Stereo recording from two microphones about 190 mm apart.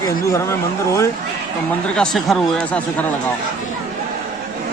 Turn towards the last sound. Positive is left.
turn(degrees=5)  # may be behind; listen again after turning